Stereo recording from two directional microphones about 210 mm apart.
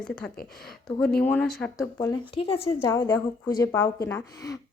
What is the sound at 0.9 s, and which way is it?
Speech, 5° left (ahead or behind).